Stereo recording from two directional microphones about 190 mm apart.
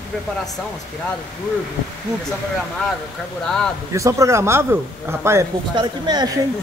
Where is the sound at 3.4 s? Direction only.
5° left (ahead or behind).